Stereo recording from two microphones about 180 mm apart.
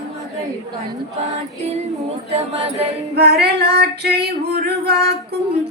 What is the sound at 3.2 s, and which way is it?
A woman's voice, 65° right (ahead or behind).